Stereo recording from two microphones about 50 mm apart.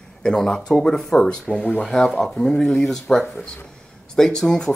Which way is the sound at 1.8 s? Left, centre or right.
Centre.